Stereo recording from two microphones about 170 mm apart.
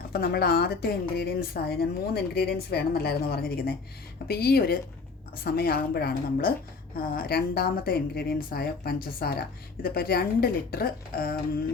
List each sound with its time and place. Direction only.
0.1 s a woman's voice: 65° left (ahead or behind)